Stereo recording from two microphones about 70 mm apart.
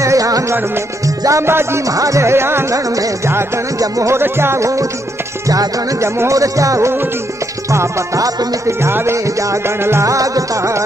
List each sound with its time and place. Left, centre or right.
0.0 s music: right
1.4 s speech: right
1.9 s music: right
3.8 s music: right
4.2 s speech: right
5.5 s music: right
6.0 s music: right